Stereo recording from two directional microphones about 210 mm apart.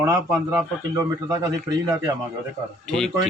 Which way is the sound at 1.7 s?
20° right (ahead or behind).